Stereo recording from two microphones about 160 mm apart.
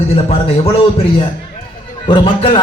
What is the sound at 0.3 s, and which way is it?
Speech, 35° left (ahead or behind).